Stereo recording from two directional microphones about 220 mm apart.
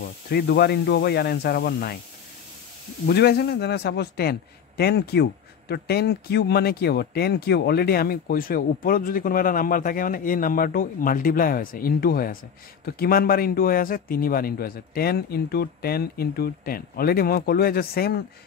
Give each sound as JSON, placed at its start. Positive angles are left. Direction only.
{"t": 0.3, "sound": "a man's voice", "side_deg": 45}
{"t": 3.1, "sound": "a man's voice", "side_deg": 45}